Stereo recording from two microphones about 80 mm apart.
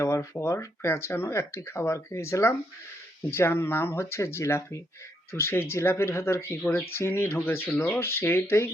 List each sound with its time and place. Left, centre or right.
0.0 s speech: left